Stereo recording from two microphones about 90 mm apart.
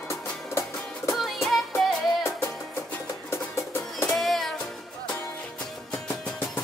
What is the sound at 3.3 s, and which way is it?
Music, 30° left (ahead or behind).